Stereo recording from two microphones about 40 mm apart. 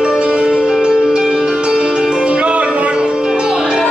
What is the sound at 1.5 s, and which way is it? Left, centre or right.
Music, right.